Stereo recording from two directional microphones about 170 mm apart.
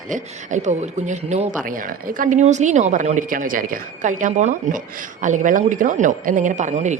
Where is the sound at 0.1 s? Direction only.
45° right (ahead or behind).